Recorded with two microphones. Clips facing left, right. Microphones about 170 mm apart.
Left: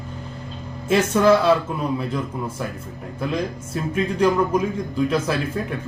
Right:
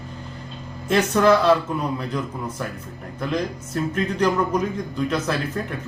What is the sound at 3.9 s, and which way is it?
Speech, 5° left (ahead or behind).